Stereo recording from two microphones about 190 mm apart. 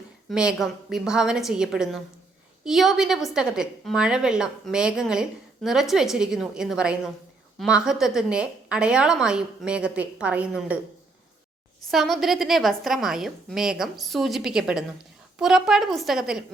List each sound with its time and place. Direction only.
0.3 s a woman's voice: 5° right (ahead or behind)
11.9 s a woman's voice: centre (ahead or behind)